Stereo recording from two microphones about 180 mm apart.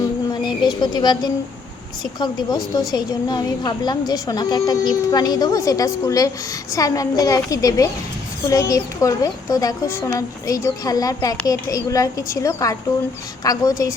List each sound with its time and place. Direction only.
0.4 s a woman's voice: 25° left (ahead or behind)